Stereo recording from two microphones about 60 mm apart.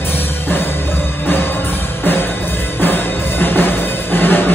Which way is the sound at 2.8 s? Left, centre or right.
Left.